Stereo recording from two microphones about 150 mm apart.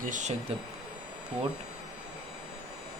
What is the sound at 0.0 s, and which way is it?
Speech, 55° right (ahead or behind).